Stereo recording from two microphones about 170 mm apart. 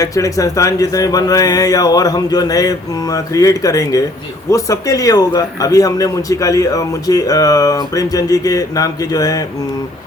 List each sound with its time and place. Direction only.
0.0 s speech: 20° left (ahead or behind)